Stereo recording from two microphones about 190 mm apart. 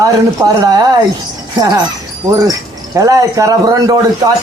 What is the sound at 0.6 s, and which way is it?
Speech, 20° right (ahead or behind).